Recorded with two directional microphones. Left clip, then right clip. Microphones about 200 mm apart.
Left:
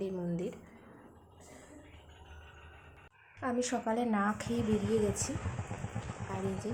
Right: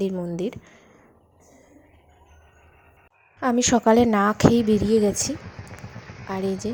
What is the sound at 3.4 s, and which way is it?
A woman's voice, 40° right (ahead or behind).